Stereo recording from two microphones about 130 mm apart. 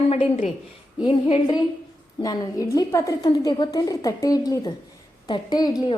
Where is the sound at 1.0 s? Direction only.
40° left (ahead or behind).